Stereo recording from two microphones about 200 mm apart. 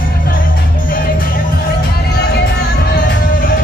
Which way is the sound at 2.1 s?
55° left (ahead or behind).